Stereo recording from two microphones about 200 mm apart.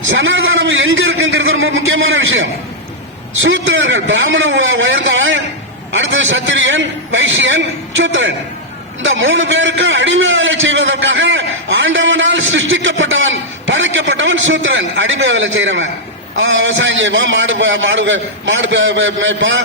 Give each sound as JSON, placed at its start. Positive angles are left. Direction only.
{"t": 0.1, "sound": "a man's voice", "side_deg": -75}
{"t": 3.7, "sound": "a man's voice", "side_deg": -70}